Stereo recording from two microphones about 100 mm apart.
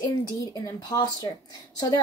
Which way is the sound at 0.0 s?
40° left (ahead or behind).